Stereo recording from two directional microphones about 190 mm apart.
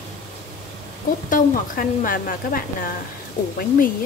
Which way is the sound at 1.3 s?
45° left (ahead or behind).